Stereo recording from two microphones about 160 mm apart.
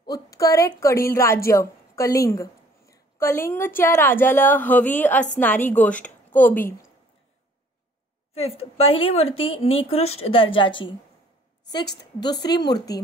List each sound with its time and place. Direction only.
0.0 s a woman's voice: 20° left (ahead or behind)
8.4 s speech: 40° left (ahead or behind)
12.2 s a woman's voice: 25° left (ahead or behind)